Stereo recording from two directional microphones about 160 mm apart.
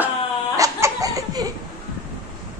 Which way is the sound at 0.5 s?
20° right (ahead or behind).